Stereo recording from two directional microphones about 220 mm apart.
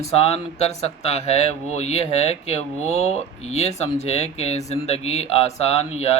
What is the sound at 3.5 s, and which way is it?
Speech, 30° left (ahead or behind).